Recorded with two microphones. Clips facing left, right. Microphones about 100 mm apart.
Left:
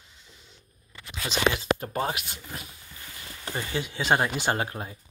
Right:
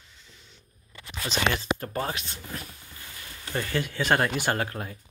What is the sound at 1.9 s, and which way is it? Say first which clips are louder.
Speech: left 2 dB; 20° left (ahead or behind).